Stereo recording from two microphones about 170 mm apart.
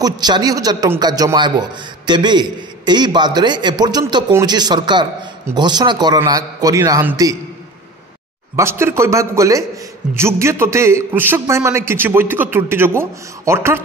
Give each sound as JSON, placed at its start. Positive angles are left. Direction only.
{"t": 0.0, "sound": "a man's voice", "side_deg": -25}
{"t": 8.5, "sound": "a man's voice", "side_deg": -15}